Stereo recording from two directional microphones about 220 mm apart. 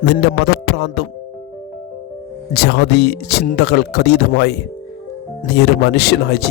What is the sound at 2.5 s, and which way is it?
Speech, 45° left (ahead or behind).